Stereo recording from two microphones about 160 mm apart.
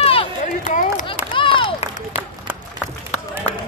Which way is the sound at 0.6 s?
55° left (ahead or behind).